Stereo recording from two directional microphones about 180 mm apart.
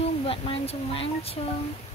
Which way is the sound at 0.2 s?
30° left (ahead or behind).